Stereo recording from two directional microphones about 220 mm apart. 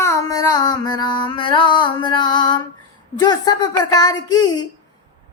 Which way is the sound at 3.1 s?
20° left (ahead or behind).